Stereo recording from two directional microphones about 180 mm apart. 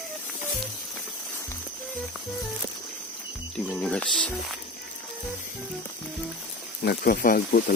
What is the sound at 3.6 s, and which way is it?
Speech, 5° left (ahead or behind).